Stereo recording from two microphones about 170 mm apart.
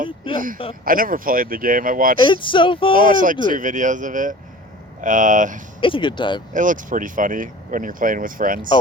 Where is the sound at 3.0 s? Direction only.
50° right (ahead or behind).